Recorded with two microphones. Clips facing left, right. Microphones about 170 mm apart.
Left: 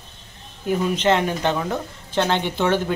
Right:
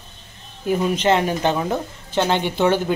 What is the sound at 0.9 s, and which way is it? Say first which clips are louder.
Speech: right 1 dB; 10° right (ahead or behind).